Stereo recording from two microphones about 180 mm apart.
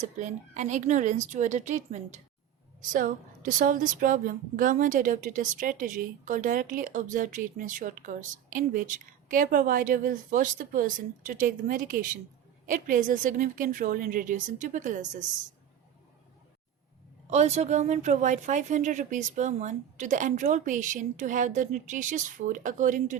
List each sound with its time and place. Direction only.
0.0 s a woman's voice: 40° right (ahead or behind)
17.2 s a woman's voice: 40° right (ahead or behind)